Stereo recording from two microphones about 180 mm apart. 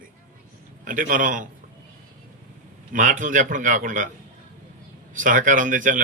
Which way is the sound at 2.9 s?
45° right (ahead or behind).